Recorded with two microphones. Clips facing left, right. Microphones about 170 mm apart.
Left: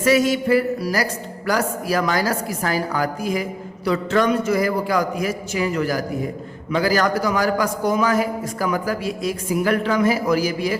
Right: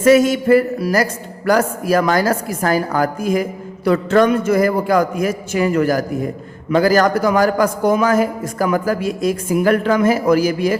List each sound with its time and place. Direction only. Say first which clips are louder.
0.0 s a man's voice: right 5 dB; 50° right (ahead or behind)